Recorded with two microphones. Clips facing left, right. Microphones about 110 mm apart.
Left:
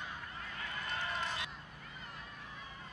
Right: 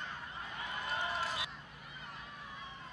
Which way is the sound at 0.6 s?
20° right (ahead or behind).